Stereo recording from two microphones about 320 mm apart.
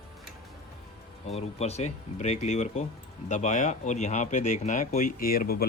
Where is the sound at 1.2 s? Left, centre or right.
Centre.